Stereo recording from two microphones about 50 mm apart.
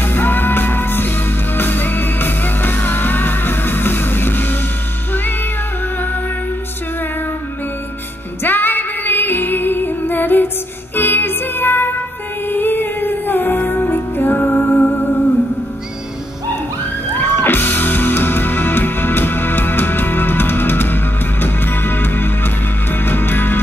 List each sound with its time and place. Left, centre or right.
0.0 s music: left
8.4 s female singing: left
11.0 s music: left
17.2 s music: left